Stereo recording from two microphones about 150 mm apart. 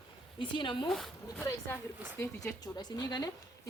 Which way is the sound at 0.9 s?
Centre (ahead or behind).